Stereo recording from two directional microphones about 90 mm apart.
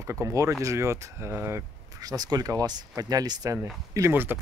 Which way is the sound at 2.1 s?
45° right (ahead or behind).